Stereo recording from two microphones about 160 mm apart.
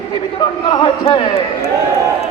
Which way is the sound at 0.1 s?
30° left (ahead or behind).